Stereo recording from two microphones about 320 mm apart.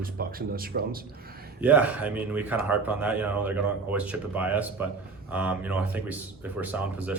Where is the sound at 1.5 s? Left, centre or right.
Centre.